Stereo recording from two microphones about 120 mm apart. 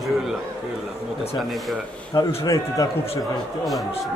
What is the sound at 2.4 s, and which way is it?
Speech, 30° left (ahead or behind).